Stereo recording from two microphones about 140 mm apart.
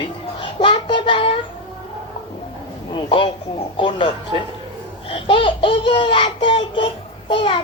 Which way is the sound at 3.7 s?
35° left (ahead or behind).